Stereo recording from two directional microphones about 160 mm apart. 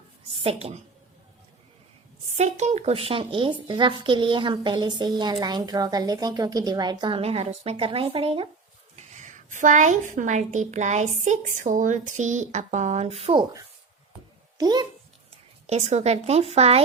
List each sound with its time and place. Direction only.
0.4 s speech: 40° right (ahead or behind)
2.3 s speech: 45° right (ahead or behind); by 7.2 s 25° right (ahead or behind)
7.2 s speech: 40° right (ahead or behind)
9.0 s a woman's voice: 50° right (ahead or behind)
14.6 s speech: 25° right (ahead or behind)
15.6 s speech: 45° right (ahead or behind)